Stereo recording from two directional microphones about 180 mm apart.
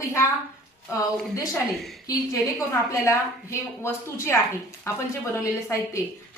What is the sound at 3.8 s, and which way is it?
A woman's voice, 15° left (ahead or behind).